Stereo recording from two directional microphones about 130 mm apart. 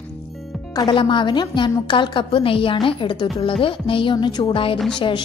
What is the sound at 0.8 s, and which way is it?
A woman's voice, 40° left (ahead or behind).